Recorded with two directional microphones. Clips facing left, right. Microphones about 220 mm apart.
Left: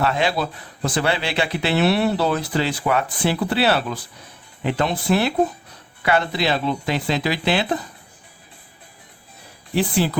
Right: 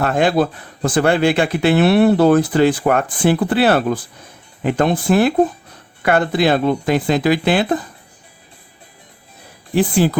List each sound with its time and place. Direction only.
0.0 s speech: 50° right (ahead or behind)
9.7 s speech: 45° right (ahead or behind)